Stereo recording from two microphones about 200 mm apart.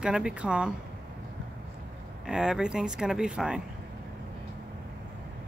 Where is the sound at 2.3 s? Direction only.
5° right (ahead or behind).